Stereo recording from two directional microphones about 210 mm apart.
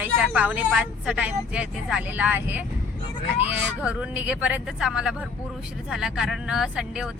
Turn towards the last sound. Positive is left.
turn(degrees=-5)  # may be behind; listen again after turning